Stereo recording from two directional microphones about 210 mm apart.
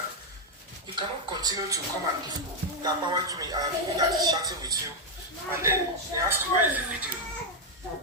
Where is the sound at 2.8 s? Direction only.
20° right (ahead or behind).